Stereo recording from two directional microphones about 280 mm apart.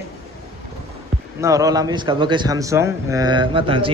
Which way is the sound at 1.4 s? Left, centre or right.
Centre.